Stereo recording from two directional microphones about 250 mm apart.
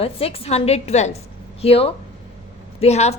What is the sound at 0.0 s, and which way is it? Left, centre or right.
A woman's voice, left.